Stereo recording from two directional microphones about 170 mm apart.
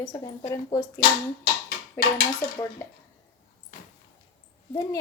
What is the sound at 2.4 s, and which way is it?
Speech, 15° left (ahead or behind).